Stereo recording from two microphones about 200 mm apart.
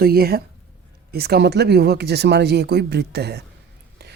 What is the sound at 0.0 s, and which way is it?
Speech, 50° right (ahead or behind).